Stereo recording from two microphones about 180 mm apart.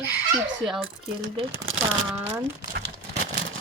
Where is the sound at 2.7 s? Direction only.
60° right (ahead or behind).